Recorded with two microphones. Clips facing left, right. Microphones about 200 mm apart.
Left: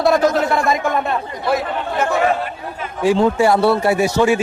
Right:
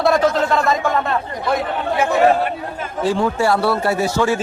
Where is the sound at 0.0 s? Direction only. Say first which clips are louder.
Left 1 dB; centre (ahead or behind).